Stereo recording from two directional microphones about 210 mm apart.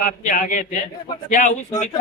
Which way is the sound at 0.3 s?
40° left (ahead or behind).